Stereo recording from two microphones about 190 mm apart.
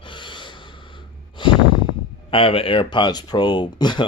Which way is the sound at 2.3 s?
30° left (ahead or behind).